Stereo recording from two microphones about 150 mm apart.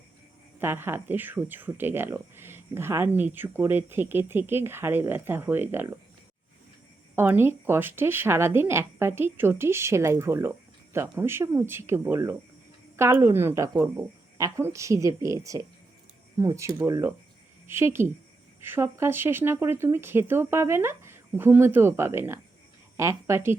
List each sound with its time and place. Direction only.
0.6 s speech: 15° right (ahead or behind)
7.2 s a woman's voice: 15° right (ahead or behind)